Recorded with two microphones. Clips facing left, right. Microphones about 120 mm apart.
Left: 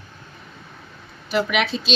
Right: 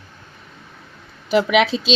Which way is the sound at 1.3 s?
90° right.